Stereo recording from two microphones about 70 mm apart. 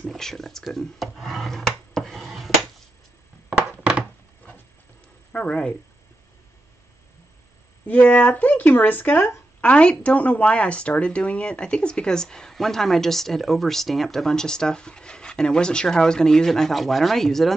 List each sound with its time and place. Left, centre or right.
0.0 s speech: centre
0.7 s a sound: centre
3.4 s thunk: centre
5.3 s speech: centre
7.8 s speech: left
9.6 s speech: centre